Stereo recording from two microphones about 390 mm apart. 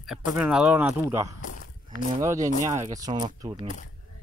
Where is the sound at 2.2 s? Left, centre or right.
Centre.